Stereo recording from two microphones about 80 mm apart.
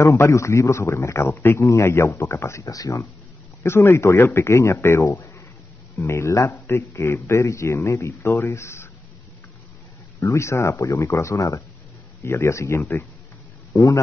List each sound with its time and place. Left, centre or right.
0.0 s a man's voice: left
3.6 s a man's voice: left
10.2 s a man's voice: left